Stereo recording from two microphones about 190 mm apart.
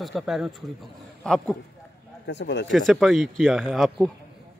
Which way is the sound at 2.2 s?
65° left (ahead or behind).